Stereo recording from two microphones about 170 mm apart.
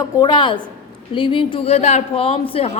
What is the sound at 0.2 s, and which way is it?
A woman's voice, 25° left (ahead or behind).